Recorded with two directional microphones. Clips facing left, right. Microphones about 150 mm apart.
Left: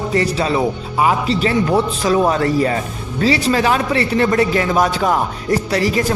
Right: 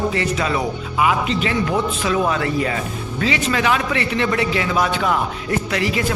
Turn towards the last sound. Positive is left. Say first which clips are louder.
# left 4 dB
turn(degrees=40)  # may be behind; listen again after turning